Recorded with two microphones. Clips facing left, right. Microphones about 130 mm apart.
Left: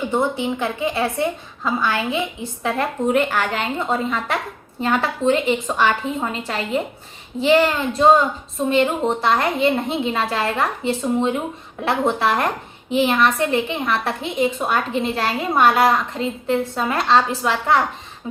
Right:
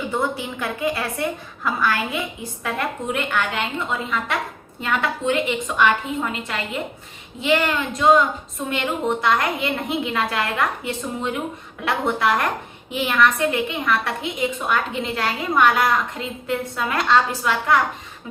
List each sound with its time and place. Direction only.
0.1 s a woman's voice: 20° left (ahead or behind)